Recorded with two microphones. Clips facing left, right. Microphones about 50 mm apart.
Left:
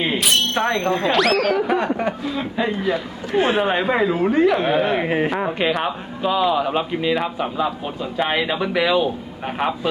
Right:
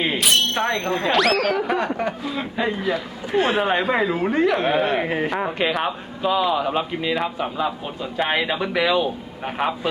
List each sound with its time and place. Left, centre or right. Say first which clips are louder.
0.0 s speech: even; centre